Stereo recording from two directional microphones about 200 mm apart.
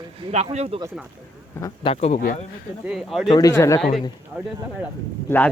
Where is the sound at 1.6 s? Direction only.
20° left (ahead or behind).